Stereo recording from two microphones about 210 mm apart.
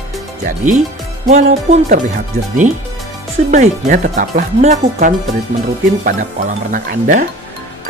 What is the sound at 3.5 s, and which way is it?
Speech, 35° right (ahead or behind).